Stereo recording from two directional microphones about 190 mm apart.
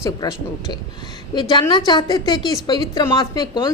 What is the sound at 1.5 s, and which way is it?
A woman's voice, 25° left (ahead or behind).